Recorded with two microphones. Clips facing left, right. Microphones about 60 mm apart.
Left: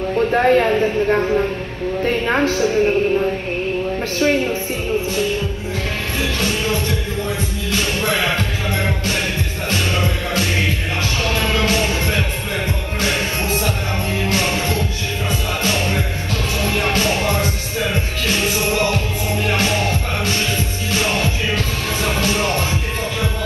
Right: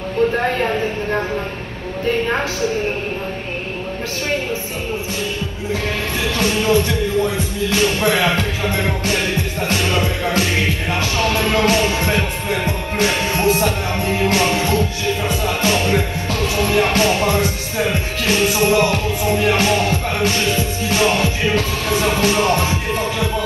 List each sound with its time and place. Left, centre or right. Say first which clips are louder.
0.3 s a man's voice: left 5 dB; left
6.4 s music: right 8 dB; right
7.2 s music: right 3 dB; left
7.8 s music: right 4 dB; right
10.0 s music: right 2 dB; left
11.1 s music: right 3 dB; right
15.6 s music: right 4 dB; right
20.9 s music: right 3 dB; right